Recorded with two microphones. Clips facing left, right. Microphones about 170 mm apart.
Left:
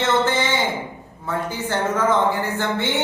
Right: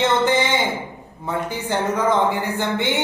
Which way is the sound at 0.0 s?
15° right (ahead or behind).